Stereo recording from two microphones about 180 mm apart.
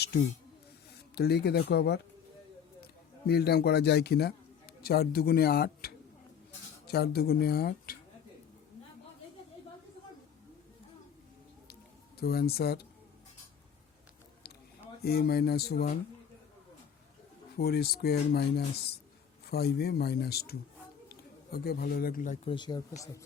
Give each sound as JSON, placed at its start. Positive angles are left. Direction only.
{"t": 1.1, "sound": "a man's voice", "side_deg": 65}
{"t": 12.2, "sound": "speech", "side_deg": 60}
{"t": 15.0, "sound": "speech", "side_deg": 60}
{"t": 17.6, "sound": "a man's voice", "side_deg": 60}
{"t": 22.4, "sound": "speech", "side_deg": 25}